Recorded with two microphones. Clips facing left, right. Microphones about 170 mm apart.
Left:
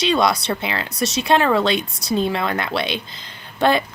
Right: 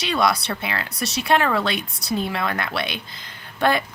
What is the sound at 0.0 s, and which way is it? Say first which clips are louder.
Speech: left 3 dB; 25° left (ahead or behind).